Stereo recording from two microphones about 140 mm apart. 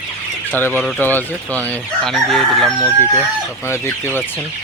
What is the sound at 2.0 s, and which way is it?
Speech, centre (ahead or behind).